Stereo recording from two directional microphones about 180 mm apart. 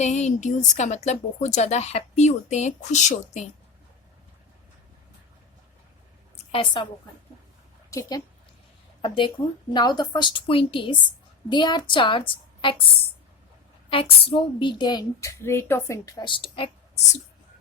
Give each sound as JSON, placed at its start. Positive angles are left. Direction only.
{"t": 0.0, "sound": "a woman's voice", "side_deg": 40}
{"t": 6.5, "sound": "a woman's voice", "side_deg": 30}
{"t": 7.9, "sound": "a woman's voice", "side_deg": 15}
{"t": 9.0, "sound": "a woman's voice", "side_deg": 30}
{"t": 13.9, "sound": "a woman's voice", "side_deg": 30}